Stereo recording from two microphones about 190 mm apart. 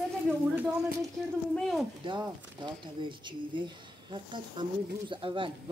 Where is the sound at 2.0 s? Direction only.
25° right (ahead or behind).